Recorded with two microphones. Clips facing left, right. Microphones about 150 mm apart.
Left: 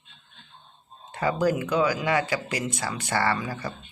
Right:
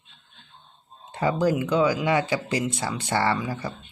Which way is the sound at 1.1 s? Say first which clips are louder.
Right 1 dB; 25° right (ahead or behind).